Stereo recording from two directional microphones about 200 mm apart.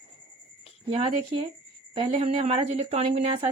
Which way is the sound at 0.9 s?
30° right (ahead or behind).